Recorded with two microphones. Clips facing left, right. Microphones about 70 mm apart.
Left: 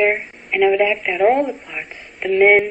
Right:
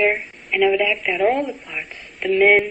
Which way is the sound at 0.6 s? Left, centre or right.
Centre.